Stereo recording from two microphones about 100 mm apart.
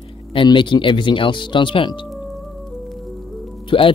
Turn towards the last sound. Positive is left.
turn(degrees=60)  # may be behind; listen again after turning